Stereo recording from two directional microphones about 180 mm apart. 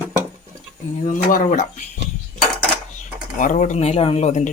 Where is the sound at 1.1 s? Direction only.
45° left (ahead or behind).